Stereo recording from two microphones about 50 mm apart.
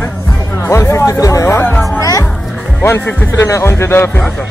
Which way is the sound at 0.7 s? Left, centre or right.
Left.